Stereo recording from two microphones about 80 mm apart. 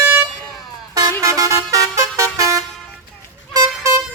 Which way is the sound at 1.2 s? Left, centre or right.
Right.